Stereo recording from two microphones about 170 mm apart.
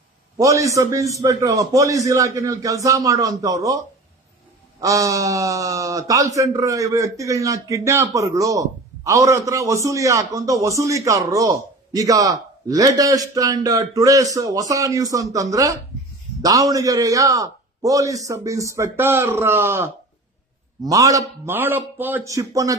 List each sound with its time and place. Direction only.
0.4 s speech: 20° right (ahead or behind)